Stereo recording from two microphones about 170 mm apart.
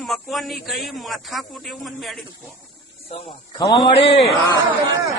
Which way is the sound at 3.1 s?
35° left (ahead or behind).